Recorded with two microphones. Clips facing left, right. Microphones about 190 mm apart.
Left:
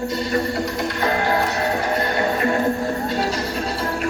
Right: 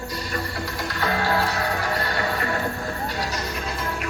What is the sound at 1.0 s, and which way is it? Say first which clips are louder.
Music: left 2 dB; 20° left (ahead or behind).